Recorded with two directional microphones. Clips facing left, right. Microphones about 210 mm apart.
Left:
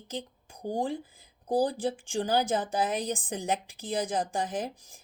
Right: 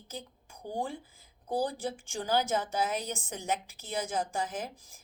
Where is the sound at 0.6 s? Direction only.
40° left (ahead or behind).